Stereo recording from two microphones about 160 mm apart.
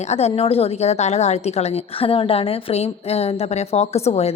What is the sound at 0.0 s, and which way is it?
A woman's voice, 40° left (ahead or behind).